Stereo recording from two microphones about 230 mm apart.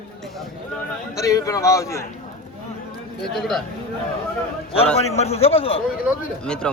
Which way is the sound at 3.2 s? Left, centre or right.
Centre.